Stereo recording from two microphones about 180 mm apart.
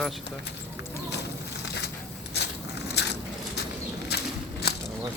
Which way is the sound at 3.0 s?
65° left (ahead or behind).